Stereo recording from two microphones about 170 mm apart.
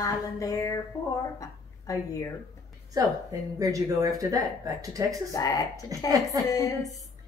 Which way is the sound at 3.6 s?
20° right (ahead or behind).